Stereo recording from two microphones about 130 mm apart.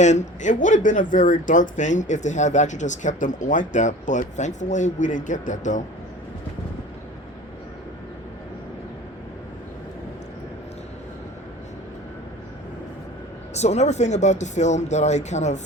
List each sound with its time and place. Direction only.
0.0 s speech: 70° left (ahead or behind)
13.5 s speech: 60° left (ahead or behind)